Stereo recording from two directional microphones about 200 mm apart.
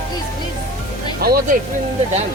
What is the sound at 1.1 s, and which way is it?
Speech, 50° right (ahead or behind).